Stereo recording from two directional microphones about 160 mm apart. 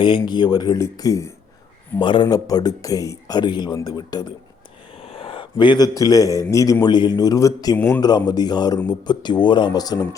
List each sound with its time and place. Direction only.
0.0 s a man's voice: 30° left (ahead or behind)
7.8 s a man's voice: 10° left (ahead or behind)
8.3 s a man's voice: 25° left (ahead or behind)